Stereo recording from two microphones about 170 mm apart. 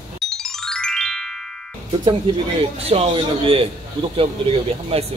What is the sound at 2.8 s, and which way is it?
A man's voice, 35° right (ahead or behind).